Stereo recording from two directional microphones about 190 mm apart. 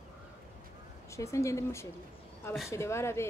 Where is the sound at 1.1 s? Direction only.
15° left (ahead or behind).